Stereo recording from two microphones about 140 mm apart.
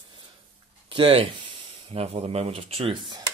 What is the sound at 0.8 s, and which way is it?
Speech, 40° right (ahead or behind).